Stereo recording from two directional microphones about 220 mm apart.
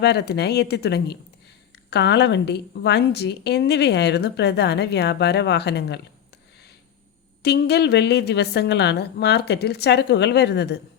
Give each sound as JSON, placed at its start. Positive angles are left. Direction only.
{"t": 0.0, "sound": "a woman's voice", "side_deg": 50}
{"t": 7.4, "sound": "a woman's voice", "side_deg": 50}